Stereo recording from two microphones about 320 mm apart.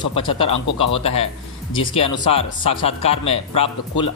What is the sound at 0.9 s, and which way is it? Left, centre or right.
Speech, centre.